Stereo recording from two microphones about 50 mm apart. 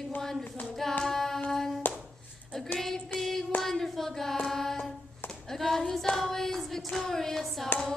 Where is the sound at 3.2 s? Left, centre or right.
Centre.